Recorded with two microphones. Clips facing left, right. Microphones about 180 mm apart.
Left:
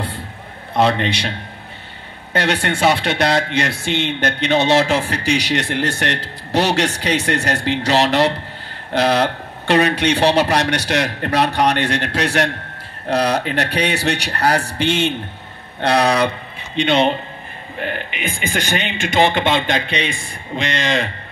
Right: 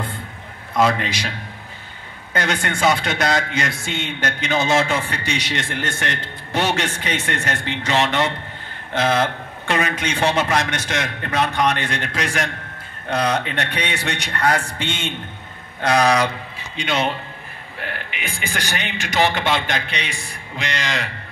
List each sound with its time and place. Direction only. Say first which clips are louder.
0.7 s speech: left 2 dB; 30° left (ahead or behind)
2.3 s a man's voice: left 4 dB; 30° left (ahead or behind)
3.8 s speech: left 7 dB; 65° left (ahead or behind)
4.5 s a man's voice: left 4 dB; 30° left (ahead or behind)
14.9 s a man's voice: left 12 dB; 70° left (ahead or behind)
15.8 s a man's voice: left 1 dB; 30° left (ahead or behind)